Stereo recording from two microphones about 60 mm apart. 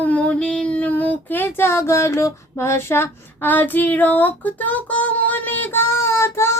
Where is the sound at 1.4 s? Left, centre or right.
Left.